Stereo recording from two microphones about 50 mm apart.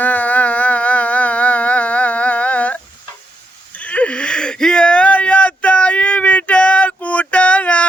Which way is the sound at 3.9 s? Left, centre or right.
Left.